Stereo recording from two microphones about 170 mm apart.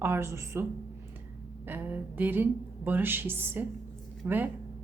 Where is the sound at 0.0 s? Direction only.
15° right (ahead or behind).